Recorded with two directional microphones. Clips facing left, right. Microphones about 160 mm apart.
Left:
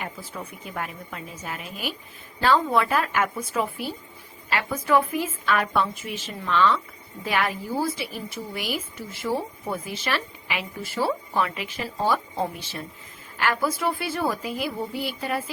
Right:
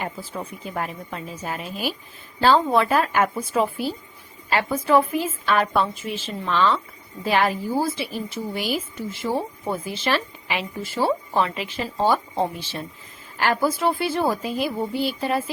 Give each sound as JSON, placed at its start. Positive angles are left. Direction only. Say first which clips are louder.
{"t": 0.0, "sound": "a woman's voice", "louder": "right 4 dB", "side_deg": -30}